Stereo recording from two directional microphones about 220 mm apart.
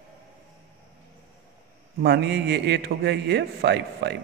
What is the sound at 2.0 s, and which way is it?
A man's voice, 50° right (ahead or behind).